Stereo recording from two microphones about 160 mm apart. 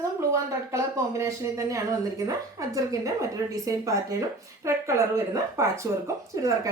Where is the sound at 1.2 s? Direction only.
20° right (ahead or behind).